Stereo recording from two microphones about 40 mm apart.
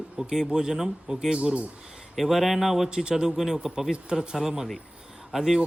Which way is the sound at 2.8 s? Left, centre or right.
Right.